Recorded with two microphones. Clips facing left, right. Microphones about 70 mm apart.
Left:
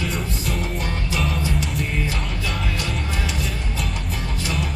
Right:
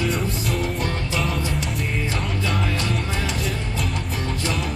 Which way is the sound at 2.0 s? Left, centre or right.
Right.